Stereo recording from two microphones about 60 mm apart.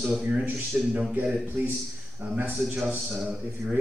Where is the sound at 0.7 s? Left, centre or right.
Right.